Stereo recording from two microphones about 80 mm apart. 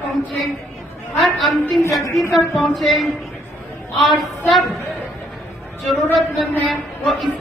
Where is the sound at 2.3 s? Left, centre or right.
Centre.